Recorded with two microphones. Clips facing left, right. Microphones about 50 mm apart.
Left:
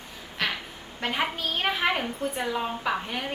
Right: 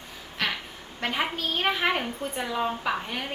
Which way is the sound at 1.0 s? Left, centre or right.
Centre.